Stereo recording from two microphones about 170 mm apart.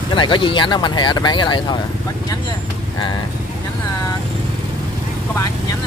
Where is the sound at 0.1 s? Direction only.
30° left (ahead or behind).